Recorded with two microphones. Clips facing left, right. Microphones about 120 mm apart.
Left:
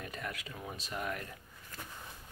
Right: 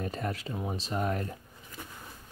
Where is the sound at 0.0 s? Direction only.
35° right (ahead or behind).